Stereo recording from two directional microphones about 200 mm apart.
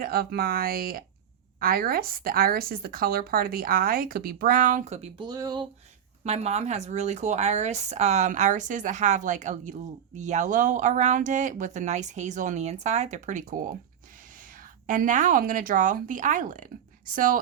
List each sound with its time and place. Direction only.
0.0 s speech: 50° right (ahead or behind); by 5.6 s 20° right (ahead or behind)
6.2 s a woman's voice: 30° right (ahead or behind)